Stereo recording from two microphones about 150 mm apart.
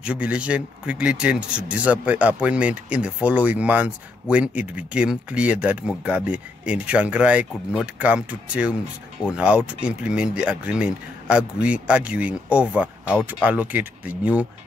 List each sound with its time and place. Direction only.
0.0 s speech: 5° right (ahead or behind)